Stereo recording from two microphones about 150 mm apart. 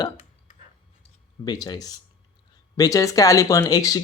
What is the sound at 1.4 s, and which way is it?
Speech, 25° left (ahead or behind).